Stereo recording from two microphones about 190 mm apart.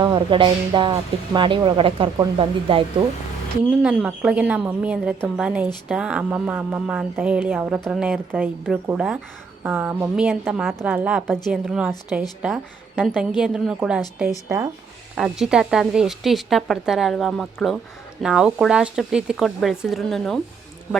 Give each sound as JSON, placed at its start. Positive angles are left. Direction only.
{"t": 0.0, "sound": "speech", "side_deg": -25}
{"t": 3.8, "sound": "a woman's voice", "side_deg": -5}
{"t": 15.1, "sound": "a woman's voice", "side_deg": -5}